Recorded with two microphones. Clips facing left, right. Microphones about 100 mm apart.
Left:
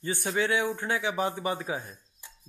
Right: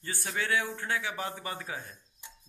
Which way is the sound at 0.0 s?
20° left (ahead or behind).